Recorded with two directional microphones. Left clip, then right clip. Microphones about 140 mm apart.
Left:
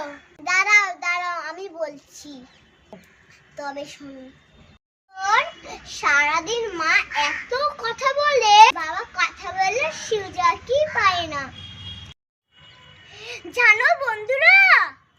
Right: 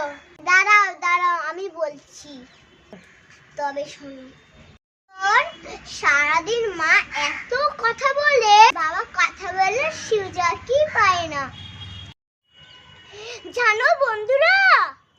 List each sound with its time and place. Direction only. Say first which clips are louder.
0.0 s child singing: right 4 dB; 15° right (ahead or behind)
3.5 s a child's voice: right 5 dB; 15° right (ahead or behind)
5.1 s a child's voice: right 1 dB; 25° right (ahead or behind)
13.1 s a child's voice: even; 25° right (ahead or behind)